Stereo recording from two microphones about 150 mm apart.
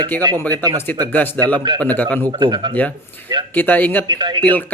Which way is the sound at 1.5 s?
30° right (ahead or behind).